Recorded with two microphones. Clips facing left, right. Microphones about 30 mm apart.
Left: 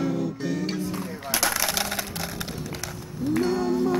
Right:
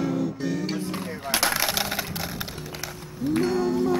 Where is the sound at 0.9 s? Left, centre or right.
Right.